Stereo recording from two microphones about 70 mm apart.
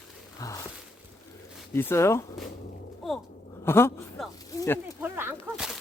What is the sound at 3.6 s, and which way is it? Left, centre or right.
Speech, left.